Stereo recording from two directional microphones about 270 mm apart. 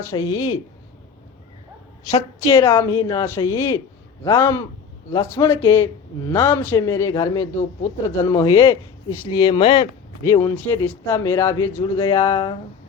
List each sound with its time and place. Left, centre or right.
0.1 s a man's voice: centre
2.0 s a man's voice: centre